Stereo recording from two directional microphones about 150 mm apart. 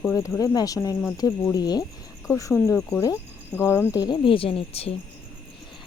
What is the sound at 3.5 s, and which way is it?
A woman's voice, 15° left (ahead or behind).